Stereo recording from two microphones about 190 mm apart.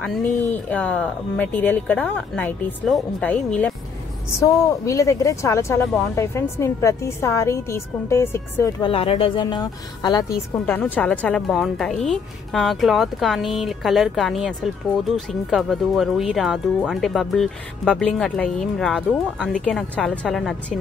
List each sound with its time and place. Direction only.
0.0 s speech: 5° left (ahead or behind)
4.4 s speech: 15° left (ahead or behind)
8.8 s a woman's voice: 30° left (ahead or behind)
10.6 s speech: 10° left (ahead or behind)